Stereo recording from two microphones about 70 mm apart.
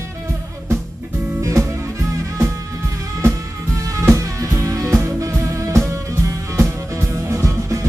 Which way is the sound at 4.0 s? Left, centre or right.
Right.